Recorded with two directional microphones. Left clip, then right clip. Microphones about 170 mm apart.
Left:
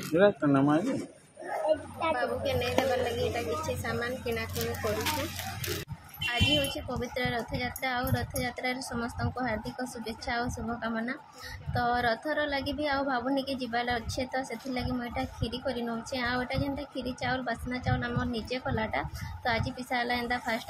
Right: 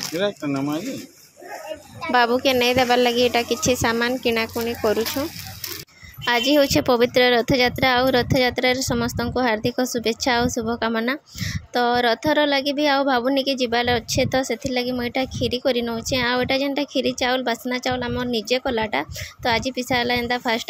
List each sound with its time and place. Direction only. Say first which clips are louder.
0.2 s speech: left 1 dB; 20° right (ahead or behind)
2.1 s a woman's voice: right 13 dB; 60° right (ahead or behind)
6.2 s a woman's voice: right 10 dB; 65° right (ahead or behind); by 20.6 s 50° right (ahead or behind)